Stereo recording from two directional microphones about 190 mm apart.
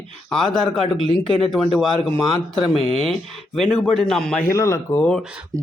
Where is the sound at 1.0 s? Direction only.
25° left (ahead or behind).